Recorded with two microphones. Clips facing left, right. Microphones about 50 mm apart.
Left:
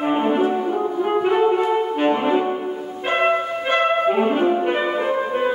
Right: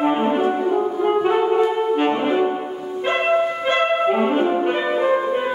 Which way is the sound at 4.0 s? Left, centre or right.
Centre.